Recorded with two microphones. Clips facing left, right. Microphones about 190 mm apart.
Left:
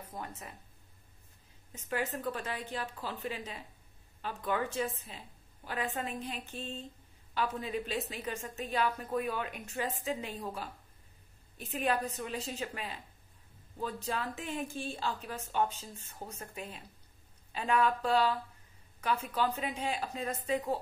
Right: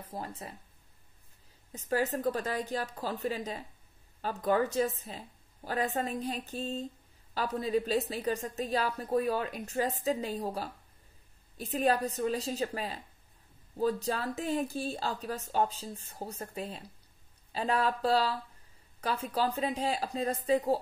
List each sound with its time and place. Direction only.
0.0 s speech: 30° right (ahead or behind)
1.7 s a woman's voice: 35° right (ahead or behind)